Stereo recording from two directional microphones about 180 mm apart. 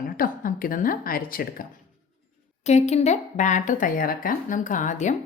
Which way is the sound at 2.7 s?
40° left (ahead or behind).